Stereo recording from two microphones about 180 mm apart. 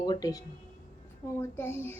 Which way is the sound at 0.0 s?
20° left (ahead or behind).